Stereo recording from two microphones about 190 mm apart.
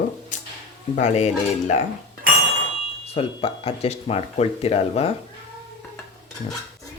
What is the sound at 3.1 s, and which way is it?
Speech, 30° left (ahead or behind).